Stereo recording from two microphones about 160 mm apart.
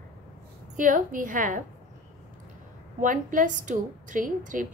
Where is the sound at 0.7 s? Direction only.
55° right (ahead or behind).